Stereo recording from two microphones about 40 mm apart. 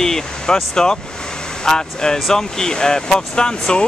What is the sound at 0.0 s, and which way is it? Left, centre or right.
Speech, centre.